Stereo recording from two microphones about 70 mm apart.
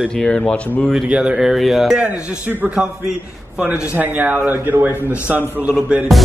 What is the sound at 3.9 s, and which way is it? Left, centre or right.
Speech, right.